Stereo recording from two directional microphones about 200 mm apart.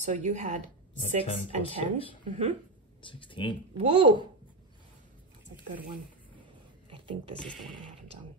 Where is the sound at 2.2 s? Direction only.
35° right (ahead or behind).